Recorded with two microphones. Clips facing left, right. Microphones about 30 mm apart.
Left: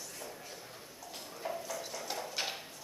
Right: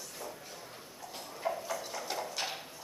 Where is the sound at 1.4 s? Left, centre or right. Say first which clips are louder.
Right 4 dB; centre.